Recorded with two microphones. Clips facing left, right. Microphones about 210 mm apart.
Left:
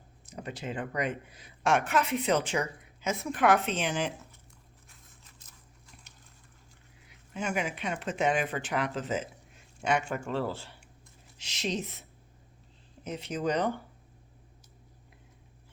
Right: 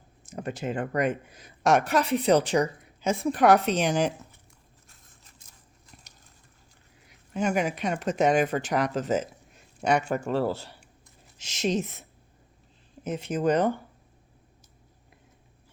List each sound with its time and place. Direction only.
0.3 s speech: 45° right (ahead or behind)
7.1 s speech: 40° right (ahead or behind)
13.1 s speech: 50° right (ahead or behind)